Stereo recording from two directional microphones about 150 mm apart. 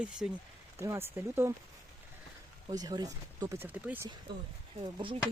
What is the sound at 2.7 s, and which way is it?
Speech, 25° right (ahead or behind).